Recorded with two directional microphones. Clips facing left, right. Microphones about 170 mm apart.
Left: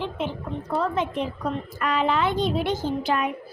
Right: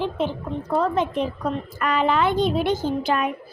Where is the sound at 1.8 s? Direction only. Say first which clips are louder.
Right 2 dB; 55° right (ahead or behind).